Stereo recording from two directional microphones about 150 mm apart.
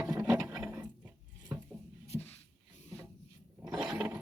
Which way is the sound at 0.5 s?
10° right (ahead or behind).